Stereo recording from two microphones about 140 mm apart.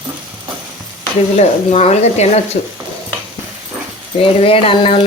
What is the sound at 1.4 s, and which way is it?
Speech, 50° left (ahead or behind).